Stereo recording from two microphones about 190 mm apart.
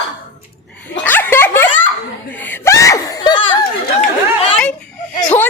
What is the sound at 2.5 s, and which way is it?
Screaming, 15° left (ahead or behind).